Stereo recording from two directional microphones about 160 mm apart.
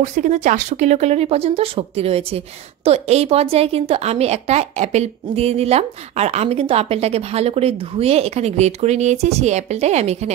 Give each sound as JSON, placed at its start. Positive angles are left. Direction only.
{"t": 0.0, "sound": "speech", "side_deg": -50}